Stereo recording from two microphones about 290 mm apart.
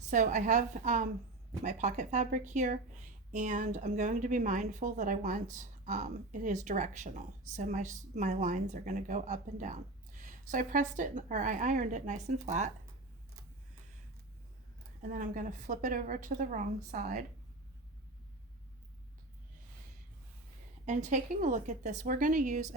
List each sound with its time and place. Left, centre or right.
0.1 s a woman's voice: right
15.0 s a woman's voice: right
20.8 s a woman's voice: right